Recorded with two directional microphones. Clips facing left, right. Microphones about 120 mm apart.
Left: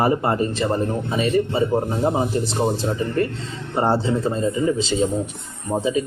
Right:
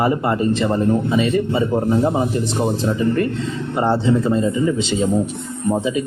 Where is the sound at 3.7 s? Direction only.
35° left (ahead or behind).